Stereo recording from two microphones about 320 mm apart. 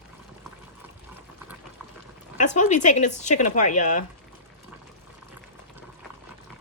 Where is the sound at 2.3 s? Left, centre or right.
Left.